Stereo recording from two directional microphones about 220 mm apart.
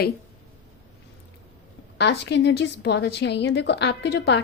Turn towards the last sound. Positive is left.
turn(degrees=50)  # may be behind; listen again after turning